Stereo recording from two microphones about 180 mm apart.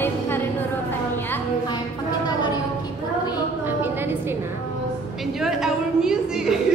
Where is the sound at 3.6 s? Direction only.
10° right (ahead or behind).